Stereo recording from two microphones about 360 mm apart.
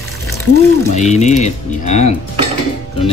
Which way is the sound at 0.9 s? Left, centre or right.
Centre.